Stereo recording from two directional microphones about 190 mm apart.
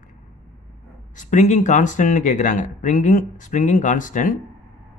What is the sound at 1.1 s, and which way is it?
Speech, 40° left (ahead or behind).